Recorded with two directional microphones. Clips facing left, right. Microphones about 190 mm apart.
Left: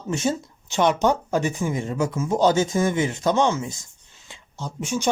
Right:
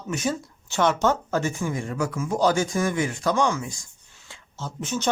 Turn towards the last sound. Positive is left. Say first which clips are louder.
# left 2 dB
turn(degrees=10)  # may be behind; listen again after turning